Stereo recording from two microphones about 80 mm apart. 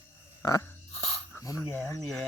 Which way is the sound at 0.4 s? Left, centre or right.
Left.